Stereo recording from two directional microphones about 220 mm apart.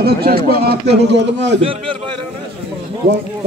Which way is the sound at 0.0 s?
45° right (ahead or behind).